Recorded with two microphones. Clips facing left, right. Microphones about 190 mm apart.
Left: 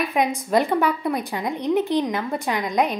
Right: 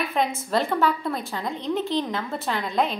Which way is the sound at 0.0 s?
15° left (ahead or behind).